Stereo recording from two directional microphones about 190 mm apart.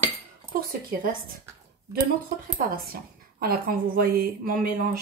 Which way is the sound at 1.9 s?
50° right (ahead or behind).